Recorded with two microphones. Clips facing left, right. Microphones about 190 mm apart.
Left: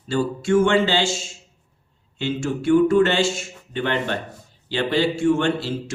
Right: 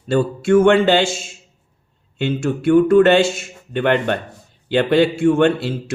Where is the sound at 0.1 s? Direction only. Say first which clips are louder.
Right 5 dB; 60° right (ahead or behind).